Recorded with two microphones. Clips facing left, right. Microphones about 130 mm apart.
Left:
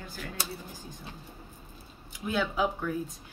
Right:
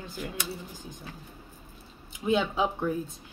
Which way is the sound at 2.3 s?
25° right (ahead or behind).